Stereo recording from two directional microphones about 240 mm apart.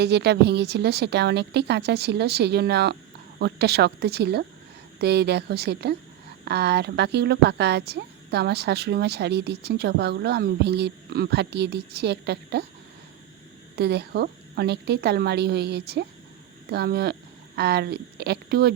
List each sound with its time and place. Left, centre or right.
0.0 s a woman's voice: right
13.7 s a woman's voice: right